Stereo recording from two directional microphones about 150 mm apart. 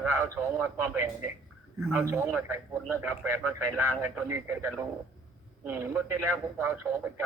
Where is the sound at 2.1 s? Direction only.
15° right (ahead or behind).